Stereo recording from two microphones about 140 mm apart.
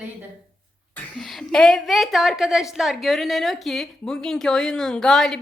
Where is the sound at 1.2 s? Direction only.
Centre (ahead or behind).